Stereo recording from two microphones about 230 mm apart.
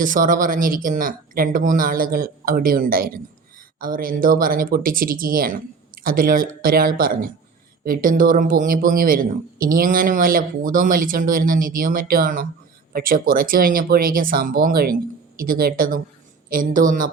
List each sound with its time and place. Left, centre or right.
0.0 s speech: right